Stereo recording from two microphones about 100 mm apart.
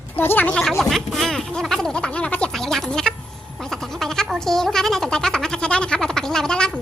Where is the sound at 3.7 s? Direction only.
5° left (ahead or behind).